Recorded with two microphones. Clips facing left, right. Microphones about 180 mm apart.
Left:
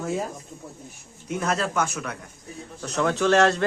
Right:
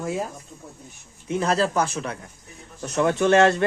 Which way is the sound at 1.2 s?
30° right (ahead or behind).